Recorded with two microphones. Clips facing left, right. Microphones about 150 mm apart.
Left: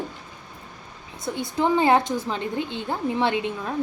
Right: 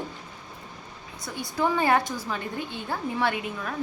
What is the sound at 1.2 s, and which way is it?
A woman's voice, 20° left (ahead or behind).